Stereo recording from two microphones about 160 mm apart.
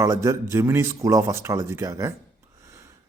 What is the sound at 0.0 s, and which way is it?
A man's voice, 20° right (ahead or behind).